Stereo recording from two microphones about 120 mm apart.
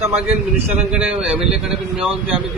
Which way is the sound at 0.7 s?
10° right (ahead or behind).